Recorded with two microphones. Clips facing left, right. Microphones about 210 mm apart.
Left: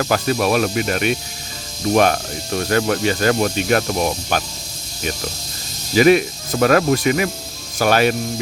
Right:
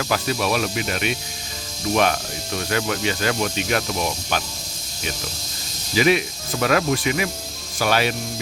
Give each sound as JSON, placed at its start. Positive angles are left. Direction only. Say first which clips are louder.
{"t": 0.0, "sound": "speech", "louder": "left 5 dB", "side_deg": 45}
{"t": 5.9, "sound": "speech", "louder": "left 6 dB", "side_deg": 45}